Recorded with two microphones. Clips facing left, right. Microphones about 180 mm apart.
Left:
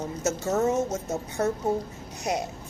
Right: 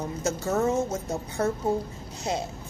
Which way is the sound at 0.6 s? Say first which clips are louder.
Left 1 dB; 25° left (ahead or behind).